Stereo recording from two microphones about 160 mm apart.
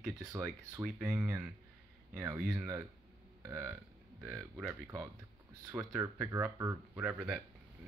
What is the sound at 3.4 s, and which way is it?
Burping, 15° right (ahead or behind).